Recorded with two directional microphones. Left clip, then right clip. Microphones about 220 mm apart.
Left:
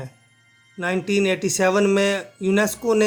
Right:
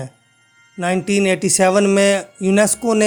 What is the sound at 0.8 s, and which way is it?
Speech, 40° right (ahead or behind).